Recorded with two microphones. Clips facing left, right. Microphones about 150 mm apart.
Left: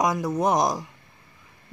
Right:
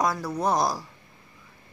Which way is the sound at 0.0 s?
20° left (ahead or behind).